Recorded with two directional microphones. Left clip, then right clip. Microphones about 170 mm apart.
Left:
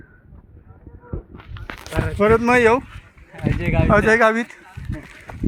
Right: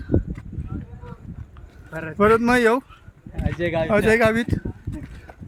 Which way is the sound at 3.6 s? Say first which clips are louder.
Right 2 dB; 30° right (ahead or behind).